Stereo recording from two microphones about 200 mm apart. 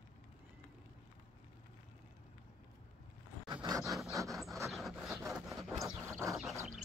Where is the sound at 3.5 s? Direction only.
20° right (ahead or behind).